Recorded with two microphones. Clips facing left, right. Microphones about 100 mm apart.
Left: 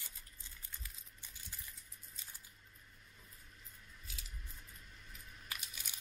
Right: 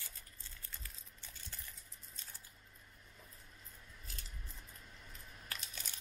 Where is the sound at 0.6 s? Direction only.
15° left (ahead or behind).